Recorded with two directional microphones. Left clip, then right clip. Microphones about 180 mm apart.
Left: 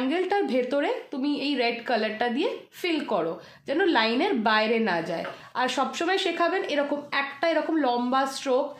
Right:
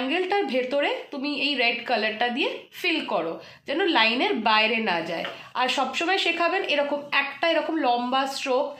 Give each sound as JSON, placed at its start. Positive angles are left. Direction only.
{"t": 0.1, "sound": "a woman's voice", "side_deg": 50}